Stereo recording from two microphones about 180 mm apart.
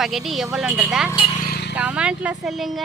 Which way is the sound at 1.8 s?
5° right (ahead or behind).